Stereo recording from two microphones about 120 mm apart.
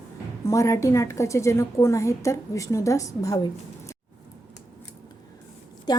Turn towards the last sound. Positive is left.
turn(degrees=35)  # may be behind; listen again after turning